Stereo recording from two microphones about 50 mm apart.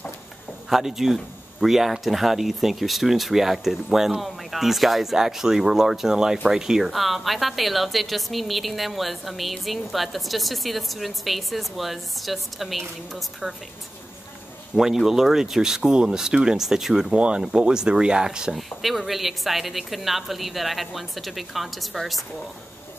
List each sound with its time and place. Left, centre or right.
0.7 s speech: centre
14.7 s speech: centre
17.1 s speech: right
18.8 s speech: centre